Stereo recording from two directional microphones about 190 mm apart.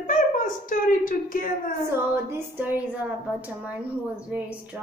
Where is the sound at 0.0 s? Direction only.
45° left (ahead or behind).